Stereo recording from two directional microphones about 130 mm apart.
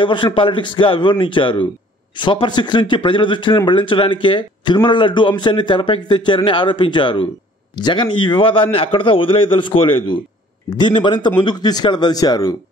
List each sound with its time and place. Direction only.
0.0 s speech: 40° left (ahead or behind)